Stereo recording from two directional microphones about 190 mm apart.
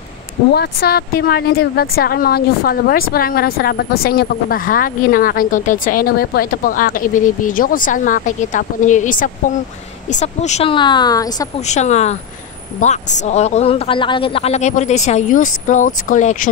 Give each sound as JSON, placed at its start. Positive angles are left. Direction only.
{"t": 0.5, "sound": "speech", "side_deg": 55}
{"t": 11.6, "sound": "speech", "side_deg": 35}